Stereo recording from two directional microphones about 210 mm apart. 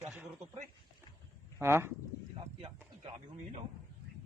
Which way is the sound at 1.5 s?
10° right (ahead or behind).